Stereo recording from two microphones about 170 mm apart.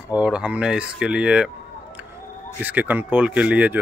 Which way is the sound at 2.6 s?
10° right (ahead or behind).